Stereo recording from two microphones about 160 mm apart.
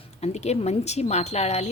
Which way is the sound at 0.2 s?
40° left (ahead or behind).